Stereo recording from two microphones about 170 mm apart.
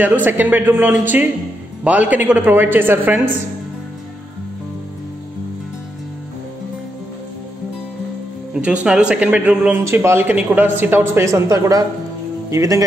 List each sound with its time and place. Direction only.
0.0 s a man's voice: 10° right (ahead or behind)
8.8 s a man's voice: 5° right (ahead or behind)